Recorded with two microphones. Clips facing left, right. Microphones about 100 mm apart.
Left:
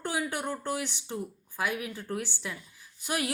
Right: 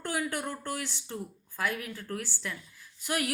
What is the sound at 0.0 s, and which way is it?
Speech, 20° left (ahead or behind).